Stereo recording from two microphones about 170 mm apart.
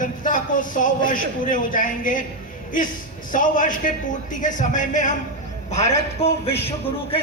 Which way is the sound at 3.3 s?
50° left (ahead or behind).